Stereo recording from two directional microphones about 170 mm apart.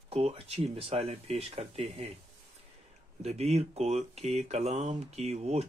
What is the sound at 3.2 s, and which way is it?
Speech, 40° right (ahead or behind).